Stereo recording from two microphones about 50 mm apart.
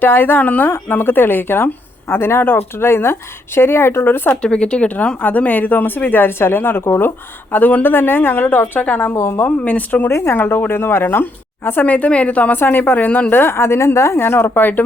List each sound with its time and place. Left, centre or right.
0.0 s speech: left
4.4 s speech: centre; by 7.1 s left
7.5 s speech: left
9.1 s a woman's voice: left
9.6 s speech: left
10.1 s speech: left
10.3 s speech: left
12.5 s speech: left
13.3 s a woman's voice: left
14.3 s speech: left